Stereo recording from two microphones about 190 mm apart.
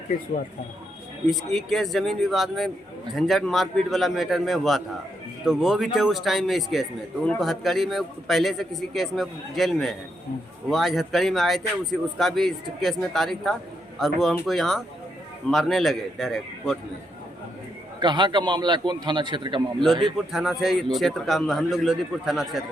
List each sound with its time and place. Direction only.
1.3 s speech: centre (ahead or behind)
18.0 s a man's voice: 25° right (ahead or behind)
20.1 s speech: centre (ahead or behind)